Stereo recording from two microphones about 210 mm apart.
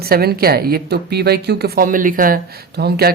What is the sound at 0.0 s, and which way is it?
A woman's voice, 50° right (ahead or behind).